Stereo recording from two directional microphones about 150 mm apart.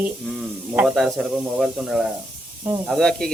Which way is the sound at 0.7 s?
Centre (ahead or behind).